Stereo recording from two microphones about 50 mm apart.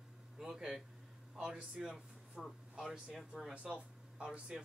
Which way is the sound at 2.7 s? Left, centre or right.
Centre.